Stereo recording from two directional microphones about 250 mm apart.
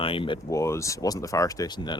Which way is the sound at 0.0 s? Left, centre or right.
Left.